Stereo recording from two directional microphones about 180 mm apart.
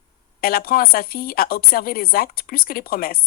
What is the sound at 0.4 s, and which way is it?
A woman's voice, 55° left (ahead or behind).